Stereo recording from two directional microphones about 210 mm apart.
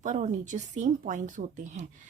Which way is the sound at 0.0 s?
35° right (ahead or behind).